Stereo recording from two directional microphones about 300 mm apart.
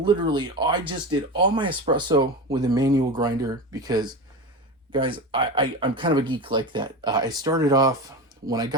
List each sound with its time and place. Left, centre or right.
0.0 s speech: centre